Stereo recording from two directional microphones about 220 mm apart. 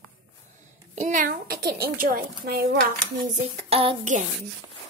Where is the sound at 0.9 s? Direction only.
35° right (ahead or behind).